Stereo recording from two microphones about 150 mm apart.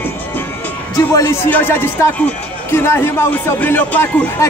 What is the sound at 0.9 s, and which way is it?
Speech, 20° left (ahead or behind).